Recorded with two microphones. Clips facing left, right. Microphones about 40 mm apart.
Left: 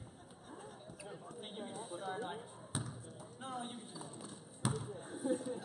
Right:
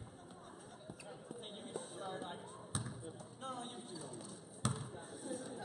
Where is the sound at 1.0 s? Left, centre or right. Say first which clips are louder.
Left 2 dB; centre.